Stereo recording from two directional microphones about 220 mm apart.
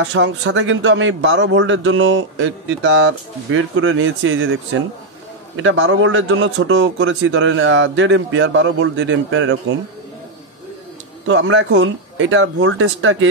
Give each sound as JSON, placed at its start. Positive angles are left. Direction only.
{"t": 0.1, "sound": "a man's voice", "side_deg": -55}
{"t": 5.6, "sound": "a man's voice", "side_deg": -60}
{"t": 11.2, "sound": "a man's voice", "side_deg": -60}